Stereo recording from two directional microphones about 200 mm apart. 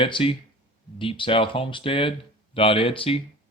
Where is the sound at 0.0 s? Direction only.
25° left (ahead or behind).